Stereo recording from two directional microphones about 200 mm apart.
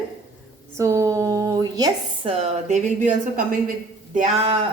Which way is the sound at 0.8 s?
15° right (ahead or behind).